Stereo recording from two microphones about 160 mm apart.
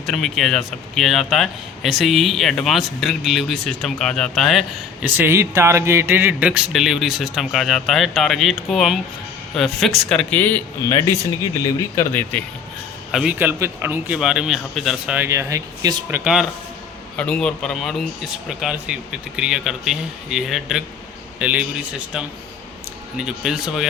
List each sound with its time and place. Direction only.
0.0 s speech: centre (ahead or behind)
5.0 s speech: 15° right (ahead or behind); by 12.4 s 15° left (ahead or behind)
13.1 s speech: centre (ahead or behind)
13.4 s speech: 10° right (ahead or behind)
16.0 s speech: 10° right (ahead or behind)
17.2 s speech: 5° left (ahead or behind)